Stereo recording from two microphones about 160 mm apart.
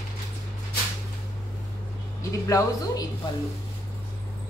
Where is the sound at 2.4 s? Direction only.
20° left (ahead or behind).